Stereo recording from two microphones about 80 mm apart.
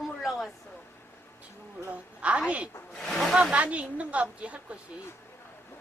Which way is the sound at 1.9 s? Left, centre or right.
Centre.